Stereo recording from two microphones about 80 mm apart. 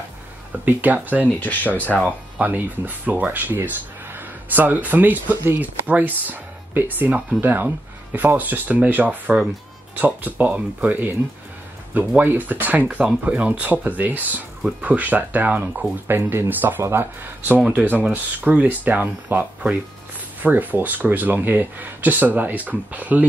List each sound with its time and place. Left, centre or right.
0.5 s speech: right
1.4 s speech: left
2.0 s speech: centre
12.2 s speech: right
17.6 s speech: centre